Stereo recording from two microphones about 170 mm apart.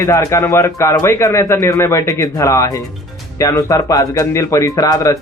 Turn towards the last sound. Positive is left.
turn(degrees=20)  # may be behind; listen again after turning